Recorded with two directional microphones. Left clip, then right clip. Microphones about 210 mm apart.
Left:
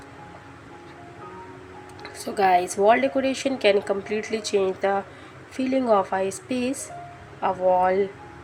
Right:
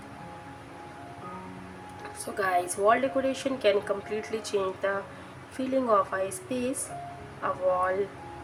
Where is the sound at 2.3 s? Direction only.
15° left (ahead or behind).